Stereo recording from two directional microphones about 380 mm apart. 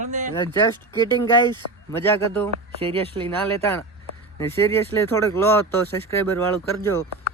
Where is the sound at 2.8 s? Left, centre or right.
Centre.